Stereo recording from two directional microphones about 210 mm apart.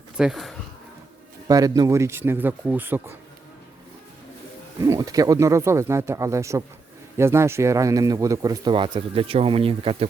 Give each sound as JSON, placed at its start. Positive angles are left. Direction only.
{"t": 0.2, "sound": "speech", "side_deg": 0}
{"t": 1.5, "sound": "speech", "side_deg": -15}
{"t": 4.8, "sound": "speech", "side_deg": -15}